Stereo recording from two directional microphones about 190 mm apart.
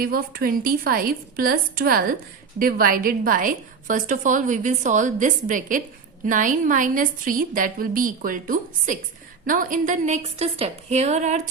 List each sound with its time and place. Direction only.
0.0 s a woman's voice: 50° right (ahead or behind)